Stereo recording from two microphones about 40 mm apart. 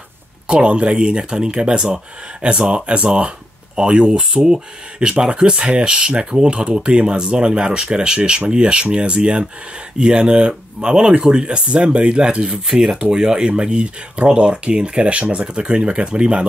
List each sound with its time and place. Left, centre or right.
0.5 s speech: right
12.6 s speech: centre; by 16.4 s right